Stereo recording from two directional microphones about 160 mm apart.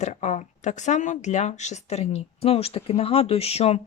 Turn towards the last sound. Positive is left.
turn(degrees=40)  # may be behind; listen again after turning